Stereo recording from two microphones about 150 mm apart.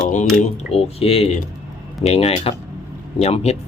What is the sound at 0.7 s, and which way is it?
Speech, 40° left (ahead or behind).